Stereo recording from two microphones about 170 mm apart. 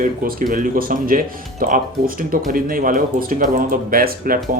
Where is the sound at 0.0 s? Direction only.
55° right (ahead or behind).